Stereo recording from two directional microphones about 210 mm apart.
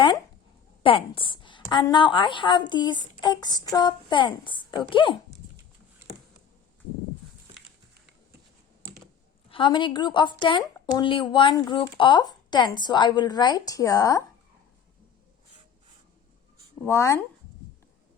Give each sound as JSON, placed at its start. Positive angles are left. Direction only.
{"t": 0.8, "sound": "a woman's voice", "side_deg": 25}
{"t": 9.5, "sound": "a woman's voice", "side_deg": 25}
{"t": 16.8, "sound": "speech", "side_deg": 15}